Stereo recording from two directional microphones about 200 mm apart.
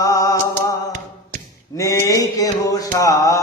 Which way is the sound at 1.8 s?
15° left (ahead or behind).